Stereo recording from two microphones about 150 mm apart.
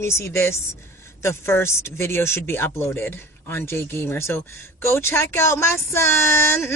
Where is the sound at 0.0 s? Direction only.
20° left (ahead or behind).